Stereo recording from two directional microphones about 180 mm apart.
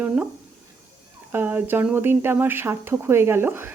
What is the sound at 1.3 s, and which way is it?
A woman's voice, 10° right (ahead or behind).